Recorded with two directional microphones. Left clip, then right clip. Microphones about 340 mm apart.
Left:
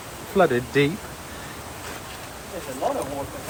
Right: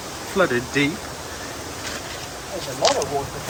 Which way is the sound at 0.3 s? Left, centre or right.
Centre.